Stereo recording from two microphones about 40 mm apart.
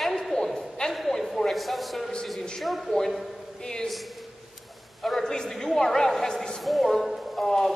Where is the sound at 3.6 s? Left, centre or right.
Centre.